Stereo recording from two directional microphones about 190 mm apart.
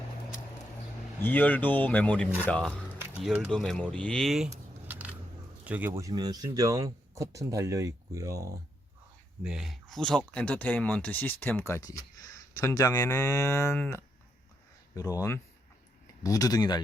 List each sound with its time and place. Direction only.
1.2 s speech: 10° left (ahead or behind)
4.9 s a sound: 10° right (ahead or behind)
5.6 s speech: 10° right (ahead or behind)
6.0 s speech: 20° right (ahead or behind)
9.4 s speech: centre (ahead or behind); by 16.8 s 20° left (ahead or behind)